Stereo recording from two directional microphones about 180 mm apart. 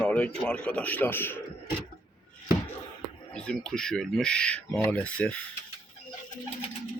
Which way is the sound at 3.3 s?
5° left (ahead or behind).